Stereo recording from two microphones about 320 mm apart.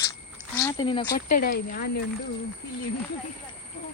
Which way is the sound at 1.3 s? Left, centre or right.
Left.